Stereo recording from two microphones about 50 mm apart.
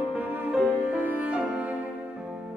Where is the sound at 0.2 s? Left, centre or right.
Right.